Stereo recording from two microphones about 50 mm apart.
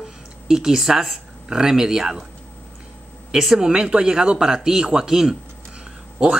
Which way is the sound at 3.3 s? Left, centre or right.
Centre.